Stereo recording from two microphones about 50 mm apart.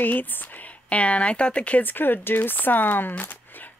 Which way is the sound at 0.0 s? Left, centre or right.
Left.